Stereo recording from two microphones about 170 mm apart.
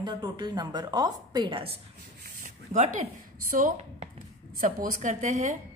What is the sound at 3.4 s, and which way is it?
A woman's voice, 50° right (ahead or behind).